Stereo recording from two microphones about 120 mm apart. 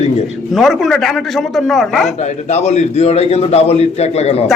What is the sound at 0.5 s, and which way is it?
A woman's voice, centre (ahead or behind).